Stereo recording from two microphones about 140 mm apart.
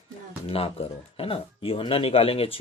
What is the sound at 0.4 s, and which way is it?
Speech, 45° left (ahead or behind).